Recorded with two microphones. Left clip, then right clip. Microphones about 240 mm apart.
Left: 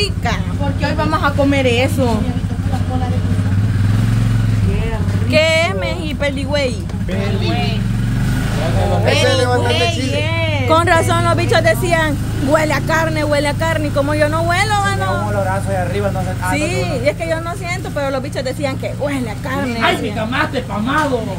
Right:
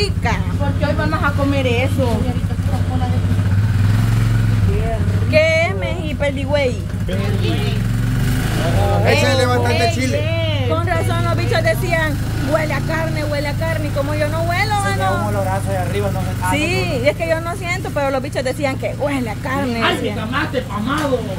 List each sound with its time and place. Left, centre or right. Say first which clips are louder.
1.5 s a woman's voice: left 4 dB; left
5.3 s vehicle: left 1 dB; centre
6.2 s speech: even; centre
10.7 s speech: left 10 dB; left
16.0 s speech: left 2 dB; centre